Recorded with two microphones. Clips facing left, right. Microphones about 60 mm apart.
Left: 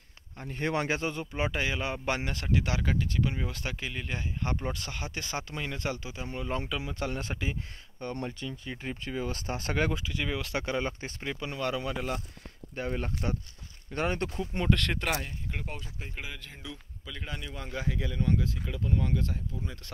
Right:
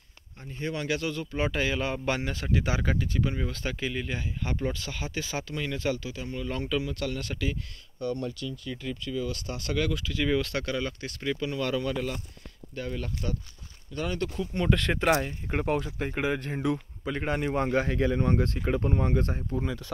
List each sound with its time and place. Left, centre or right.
0.5 s speech: left
0.8 s speech: left
1.2 s speech: centre
5.5 s speech: centre
6.0 s speech: left
8.0 s speech: left
10.0 s speech: centre
10.6 s speech: left
12.7 s speech: left
14.7 s speech: centre
15.4 s speech: right